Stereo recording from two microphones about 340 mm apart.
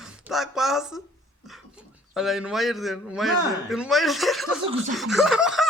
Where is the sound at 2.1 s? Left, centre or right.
Centre.